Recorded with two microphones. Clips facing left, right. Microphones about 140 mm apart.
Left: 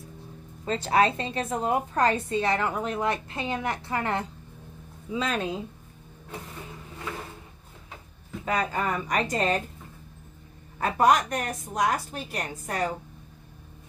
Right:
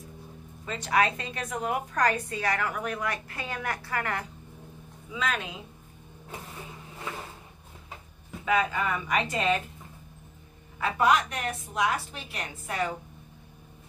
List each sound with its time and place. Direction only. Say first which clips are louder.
0.7 s a woman's voice: left 3 dB; 30° left (ahead or behind)
8.5 s speech: right 1 dB; 40° left (ahead or behind)
10.8 s a woman's voice: left 3 dB; 45° left (ahead or behind)